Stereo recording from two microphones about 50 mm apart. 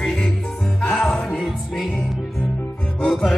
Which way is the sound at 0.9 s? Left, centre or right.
Centre.